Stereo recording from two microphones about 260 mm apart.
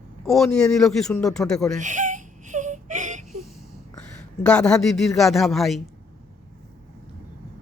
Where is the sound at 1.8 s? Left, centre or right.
Right.